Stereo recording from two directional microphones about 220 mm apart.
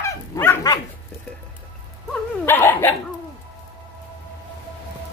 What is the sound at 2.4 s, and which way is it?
Dog, 10° left (ahead or behind).